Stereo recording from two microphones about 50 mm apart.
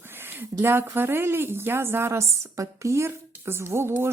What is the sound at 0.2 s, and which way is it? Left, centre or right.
Speech, right.